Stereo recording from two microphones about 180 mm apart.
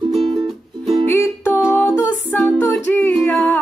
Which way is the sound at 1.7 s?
10° left (ahead or behind).